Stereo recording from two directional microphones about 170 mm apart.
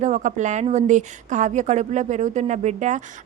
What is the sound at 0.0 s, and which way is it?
Speech, 45° right (ahead or behind).